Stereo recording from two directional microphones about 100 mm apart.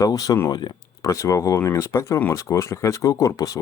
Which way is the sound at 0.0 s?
40° left (ahead or behind).